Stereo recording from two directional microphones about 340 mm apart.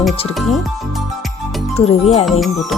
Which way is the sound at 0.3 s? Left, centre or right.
Centre.